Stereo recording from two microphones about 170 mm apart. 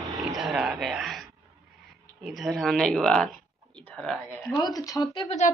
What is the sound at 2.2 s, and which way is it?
Speech, centre (ahead or behind).